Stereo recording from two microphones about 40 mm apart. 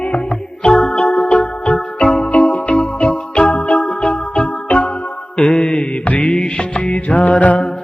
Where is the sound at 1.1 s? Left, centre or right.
Left.